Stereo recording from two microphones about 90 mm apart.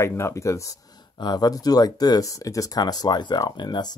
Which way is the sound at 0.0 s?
30° left (ahead or behind).